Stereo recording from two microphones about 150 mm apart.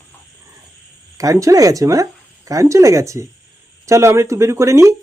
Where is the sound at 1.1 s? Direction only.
20° right (ahead or behind).